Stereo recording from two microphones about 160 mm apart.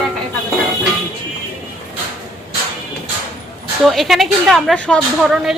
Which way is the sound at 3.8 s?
Centre (ahead or behind).